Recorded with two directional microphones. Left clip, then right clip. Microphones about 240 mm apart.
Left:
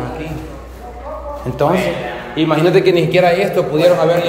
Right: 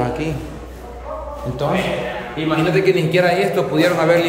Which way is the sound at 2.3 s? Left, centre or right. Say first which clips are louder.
Left 6 dB; centre.